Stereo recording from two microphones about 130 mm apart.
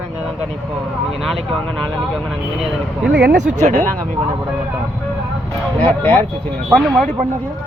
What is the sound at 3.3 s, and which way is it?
Speech, 90° right.